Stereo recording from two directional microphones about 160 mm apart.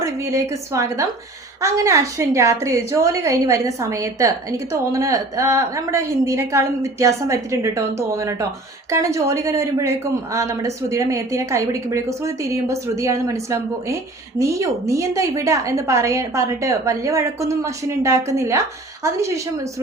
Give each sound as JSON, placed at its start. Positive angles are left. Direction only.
{"t": 0.0, "sound": "a woman's voice", "side_deg": -20}